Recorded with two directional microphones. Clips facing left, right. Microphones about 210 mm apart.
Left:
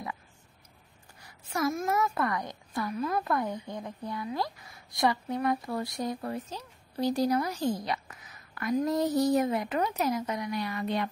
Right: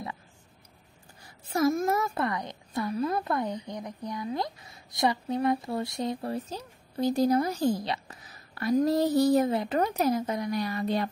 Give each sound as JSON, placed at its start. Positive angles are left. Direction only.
{"t": 1.2, "sound": "a woman's voice", "side_deg": -30}
{"t": 7.5, "sound": "speech", "side_deg": -45}
{"t": 7.8, "sound": "a woman's voice", "side_deg": -30}
{"t": 9.8, "sound": "speech", "side_deg": -45}
{"t": 10.1, "sound": "speech", "side_deg": -30}